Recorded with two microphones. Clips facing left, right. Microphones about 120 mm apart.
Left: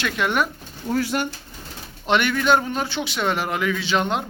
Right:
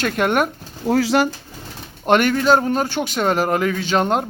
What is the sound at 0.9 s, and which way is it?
Speech, 90° right.